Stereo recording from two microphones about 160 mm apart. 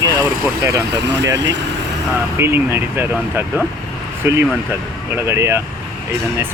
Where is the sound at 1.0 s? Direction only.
90° right.